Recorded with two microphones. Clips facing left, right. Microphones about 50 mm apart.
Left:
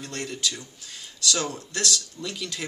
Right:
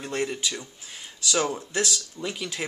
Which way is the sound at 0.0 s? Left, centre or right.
Centre.